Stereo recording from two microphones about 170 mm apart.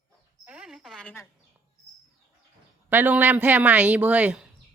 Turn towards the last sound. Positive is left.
turn(degrees=-5)  # may be behind; listen again after turning